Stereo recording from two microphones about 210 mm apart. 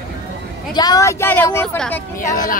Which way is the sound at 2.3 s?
40° left (ahead or behind).